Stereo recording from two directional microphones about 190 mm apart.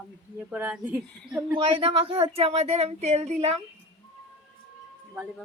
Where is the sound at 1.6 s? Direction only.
30° right (ahead or behind).